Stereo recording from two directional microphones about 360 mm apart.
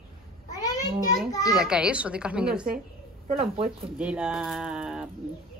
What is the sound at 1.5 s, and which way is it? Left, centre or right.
Speech, centre.